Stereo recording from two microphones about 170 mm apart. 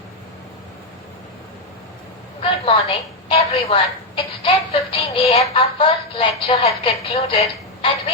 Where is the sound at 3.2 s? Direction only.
35° left (ahead or behind).